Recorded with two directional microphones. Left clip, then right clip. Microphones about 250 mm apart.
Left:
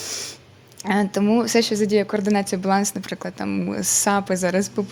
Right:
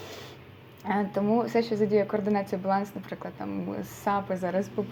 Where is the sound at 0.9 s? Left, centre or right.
Left.